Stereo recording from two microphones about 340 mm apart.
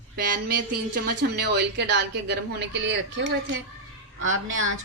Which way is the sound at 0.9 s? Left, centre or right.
Right.